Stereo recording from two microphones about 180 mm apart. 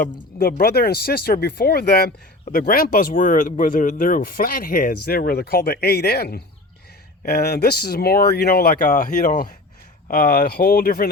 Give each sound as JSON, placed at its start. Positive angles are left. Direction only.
{"t": 0.0, "sound": "speech", "side_deg": 55}